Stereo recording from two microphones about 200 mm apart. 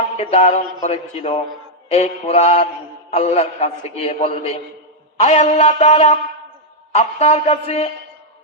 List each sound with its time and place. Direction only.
0.2 s a man's voice: 30° left (ahead or behind)